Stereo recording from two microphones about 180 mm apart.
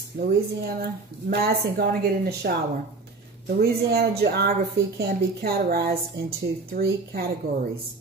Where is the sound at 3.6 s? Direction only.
60° right (ahead or behind).